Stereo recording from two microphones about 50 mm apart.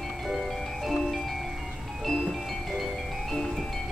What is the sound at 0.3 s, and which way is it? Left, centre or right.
Music, centre.